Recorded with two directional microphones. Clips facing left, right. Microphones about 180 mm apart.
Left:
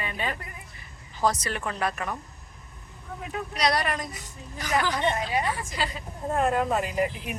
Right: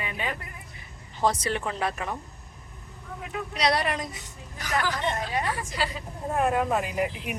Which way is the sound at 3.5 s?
30° right (ahead or behind).